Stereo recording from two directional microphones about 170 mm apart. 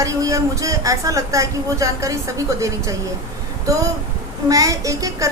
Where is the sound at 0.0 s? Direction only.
20° right (ahead or behind).